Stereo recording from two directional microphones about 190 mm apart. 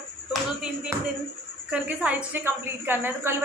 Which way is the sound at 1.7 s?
5° right (ahead or behind).